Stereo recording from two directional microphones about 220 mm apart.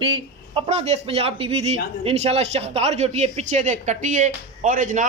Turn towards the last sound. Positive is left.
turn(degrees=-35)  # may be behind; listen again after turning